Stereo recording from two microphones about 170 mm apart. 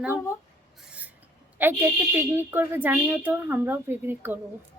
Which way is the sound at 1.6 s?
10° right (ahead or behind).